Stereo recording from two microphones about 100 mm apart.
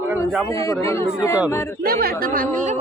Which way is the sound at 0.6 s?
30° left (ahead or behind).